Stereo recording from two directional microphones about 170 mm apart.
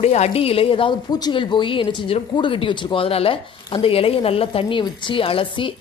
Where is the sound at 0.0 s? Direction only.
40° left (ahead or behind).